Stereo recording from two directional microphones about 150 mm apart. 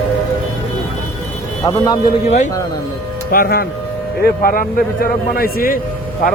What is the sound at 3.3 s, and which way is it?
A man's voice, 80° left.